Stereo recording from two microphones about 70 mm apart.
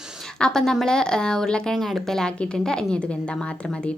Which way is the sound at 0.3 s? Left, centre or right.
Centre.